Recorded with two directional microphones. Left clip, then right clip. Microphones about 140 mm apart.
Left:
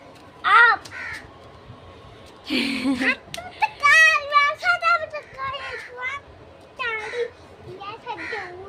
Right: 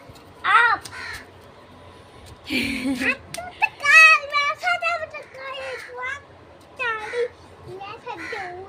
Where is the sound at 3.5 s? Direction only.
Centre (ahead or behind).